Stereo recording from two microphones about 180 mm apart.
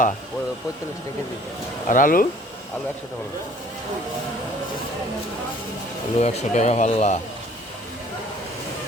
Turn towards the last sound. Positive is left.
turn(degrees=40)  # may be behind; listen again after turning